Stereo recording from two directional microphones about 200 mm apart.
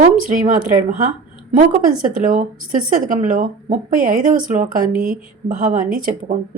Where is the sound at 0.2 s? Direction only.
40° right (ahead or behind).